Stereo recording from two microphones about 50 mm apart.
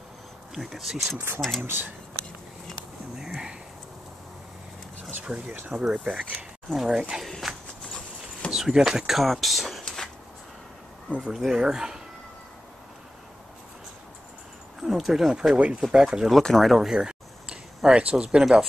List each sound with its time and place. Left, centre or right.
0.6 s speech: centre
1.6 s speech: right
3.2 s a sound: centre
5.2 s speech: right
6.7 s speech: centre
7.2 s clip-clop: centre
8.5 s speech: centre
9.2 s speech: centre
11.1 s speech: centre
14.8 s speech: centre
15.5 s speech: right
16.4 s speech: centre
16.9 s a sound: centre
18.4 s speech: centre